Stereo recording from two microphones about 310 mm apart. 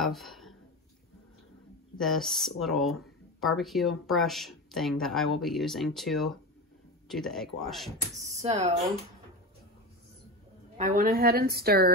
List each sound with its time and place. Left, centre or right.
0.0 s a sound: centre
2.0 s speech: centre
8.2 s speech: centre
10.8 s a woman's voice: right